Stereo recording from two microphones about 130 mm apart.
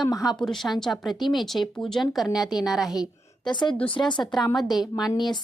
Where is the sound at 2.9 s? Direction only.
35° left (ahead or behind).